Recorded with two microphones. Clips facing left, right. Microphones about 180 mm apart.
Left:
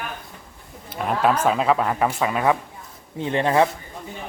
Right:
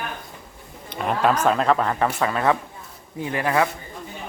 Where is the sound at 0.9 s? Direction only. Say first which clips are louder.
Even; 5° left (ahead or behind).